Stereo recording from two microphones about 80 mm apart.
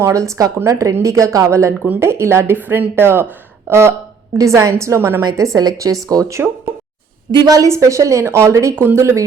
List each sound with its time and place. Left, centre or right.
0.0 s a woman's voice: right
8.7 s speech: right